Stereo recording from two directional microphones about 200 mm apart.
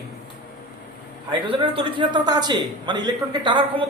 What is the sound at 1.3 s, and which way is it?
Speech, 25° right (ahead or behind).